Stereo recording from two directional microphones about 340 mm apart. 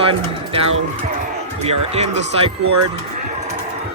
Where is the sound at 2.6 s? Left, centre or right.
Right.